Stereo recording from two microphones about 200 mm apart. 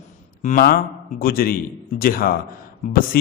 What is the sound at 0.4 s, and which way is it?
A man's voice, 45° left (ahead or behind).